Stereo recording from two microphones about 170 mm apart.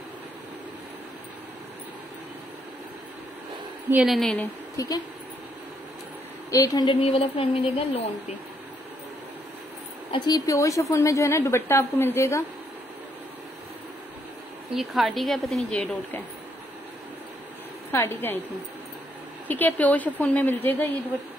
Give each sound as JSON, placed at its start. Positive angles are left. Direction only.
{"t": 3.9, "sound": "a woman's voice", "side_deg": 0}
{"t": 4.7, "sound": "a woman's voice", "side_deg": 20}
{"t": 6.5, "sound": "a woman's voice", "side_deg": 20}
{"t": 10.1, "sound": "a woman's voice", "side_deg": 25}
{"t": 14.7, "sound": "a woman's voice", "side_deg": 0}
{"t": 17.9, "sound": "a woman's voice", "side_deg": 15}
{"t": 19.4, "sound": "a woman's voice", "side_deg": 10}